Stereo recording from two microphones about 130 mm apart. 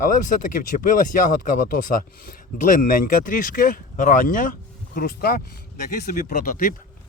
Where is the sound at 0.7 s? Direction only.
90° left.